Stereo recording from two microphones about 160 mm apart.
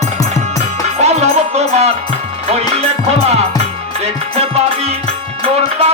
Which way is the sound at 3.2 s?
40° right (ahead or behind).